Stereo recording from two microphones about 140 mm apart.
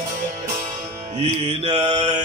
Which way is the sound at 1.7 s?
55° right (ahead or behind).